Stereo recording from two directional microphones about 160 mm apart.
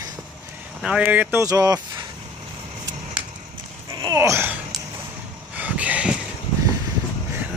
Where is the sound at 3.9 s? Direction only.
20° right (ahead or behind).